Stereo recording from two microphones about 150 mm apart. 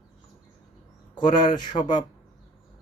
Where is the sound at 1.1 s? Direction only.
30° left (ahead or behind).